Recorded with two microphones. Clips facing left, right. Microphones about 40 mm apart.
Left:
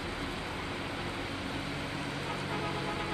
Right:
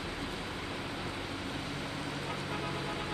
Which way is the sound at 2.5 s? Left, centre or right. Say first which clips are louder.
Left 3 dB; left.